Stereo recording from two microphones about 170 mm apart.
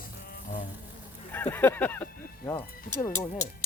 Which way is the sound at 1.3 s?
10° left (ahead or behind).